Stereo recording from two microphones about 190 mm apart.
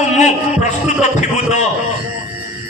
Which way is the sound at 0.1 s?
40° left (ahead or behind).